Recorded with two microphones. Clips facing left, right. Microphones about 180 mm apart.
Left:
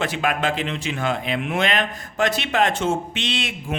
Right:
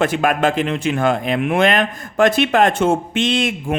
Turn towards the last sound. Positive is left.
turn(degrees=-50)  # may be behind; listen again after turning